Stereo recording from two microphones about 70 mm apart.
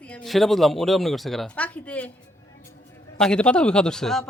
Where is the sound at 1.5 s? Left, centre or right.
Centre.